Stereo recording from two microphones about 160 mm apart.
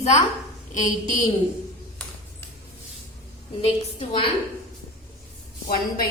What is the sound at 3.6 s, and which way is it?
Speech, 40° left (ahead or behind).